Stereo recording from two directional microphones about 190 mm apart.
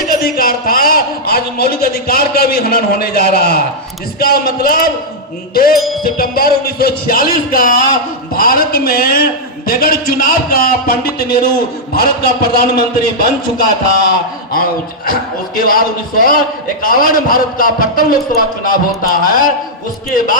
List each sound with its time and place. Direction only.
0.1 s a man's voice: 50° left (ahead or behind)
5.7 s music: centre (ahead or behind)
6.0 s speech: 50° left (ahead or behind)
14.5 s speech: 50° left (ahead or behind)